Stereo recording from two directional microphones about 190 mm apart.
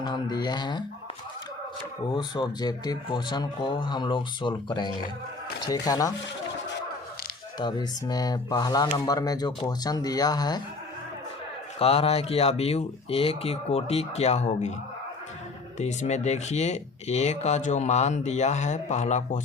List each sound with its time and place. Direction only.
0.0 s speech: 20° left (ahead or behind)
2.0 s speech: 25° left (ahead or behind)
7.6 s speech: 20° left (ahead or behind)
11.8 s speech: 30° left (ahead or behind)
15.8 s speech: 35° left (ahead or behind)